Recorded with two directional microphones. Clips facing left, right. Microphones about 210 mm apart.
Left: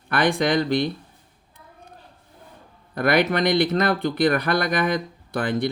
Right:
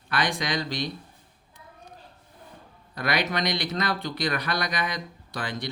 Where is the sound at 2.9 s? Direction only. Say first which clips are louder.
Left 8 dB; 55° left (ahead or behind).